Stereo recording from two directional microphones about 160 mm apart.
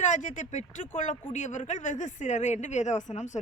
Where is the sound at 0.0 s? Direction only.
50° left (ahead or behind).